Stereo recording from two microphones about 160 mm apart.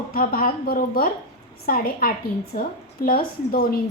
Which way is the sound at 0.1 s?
65° left (ahead or behind).